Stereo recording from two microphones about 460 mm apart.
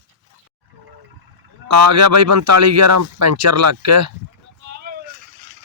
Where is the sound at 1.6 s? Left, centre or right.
Right.